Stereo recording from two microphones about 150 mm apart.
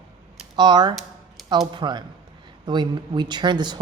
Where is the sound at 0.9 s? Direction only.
Centre (ahead or behind).